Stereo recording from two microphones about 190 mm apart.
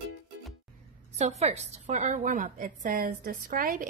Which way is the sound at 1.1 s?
35° right (ahead or behind).